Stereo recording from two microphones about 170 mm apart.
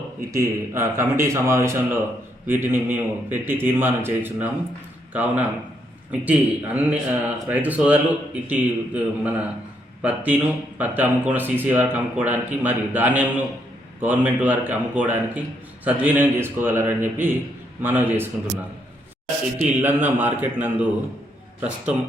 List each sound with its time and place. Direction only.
0.3 s speech: 15° right (ahead or behind)
19.8 s speech: 10° right (ahead or behind)